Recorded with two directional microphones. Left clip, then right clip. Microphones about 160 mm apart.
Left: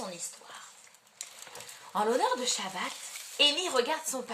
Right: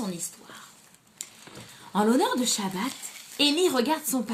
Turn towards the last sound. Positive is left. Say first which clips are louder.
# right 3 dB
turn(degrees=-15)  # may be behind; listen again after turning